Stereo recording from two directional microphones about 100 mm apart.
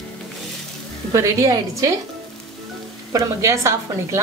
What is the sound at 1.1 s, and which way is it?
Speech, 30° right (ahead or behind).